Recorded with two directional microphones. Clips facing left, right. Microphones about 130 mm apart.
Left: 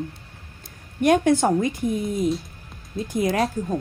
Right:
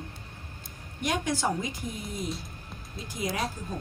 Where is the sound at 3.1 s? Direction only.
60° left (ahead or behind).